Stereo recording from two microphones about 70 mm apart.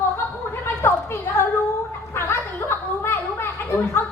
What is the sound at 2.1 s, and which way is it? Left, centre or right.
Chuckle, left.